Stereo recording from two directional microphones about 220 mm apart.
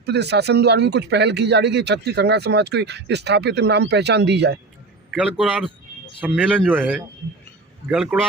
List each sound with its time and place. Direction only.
0.0 s speech: 50° right (ahead or behind)
5.1 s a man's voice: 5° right (ahead or behind)